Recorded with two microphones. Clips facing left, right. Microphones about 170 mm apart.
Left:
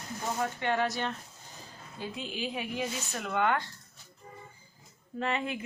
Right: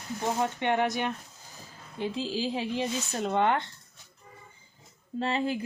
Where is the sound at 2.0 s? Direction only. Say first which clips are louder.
Right 6 dB; 30° right (ahead or behind).